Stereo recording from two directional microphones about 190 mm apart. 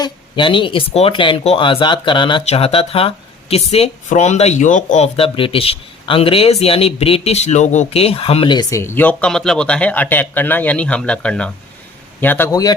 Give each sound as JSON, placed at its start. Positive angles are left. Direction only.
{"t": 0.0, "sound": "a man's voice", "side_deg": 25}